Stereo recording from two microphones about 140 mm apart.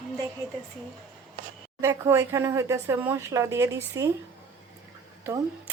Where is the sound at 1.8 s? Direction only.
20° right (ahead or behind).